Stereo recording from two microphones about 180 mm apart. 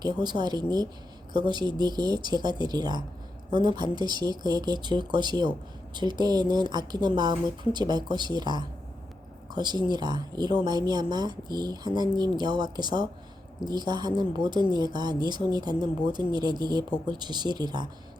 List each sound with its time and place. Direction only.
0.0 s speech: 25° right (ahead or behind)